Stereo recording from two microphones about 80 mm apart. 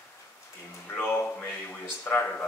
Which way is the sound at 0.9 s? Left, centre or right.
Left.